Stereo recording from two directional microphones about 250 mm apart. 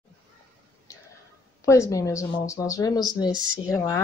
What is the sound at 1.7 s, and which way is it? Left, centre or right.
A woman's voice, centre.